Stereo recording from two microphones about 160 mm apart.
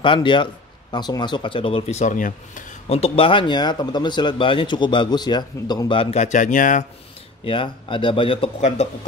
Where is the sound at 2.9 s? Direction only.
35° left (ahead or behind); by 6.8 s 55° left (ahead or behind).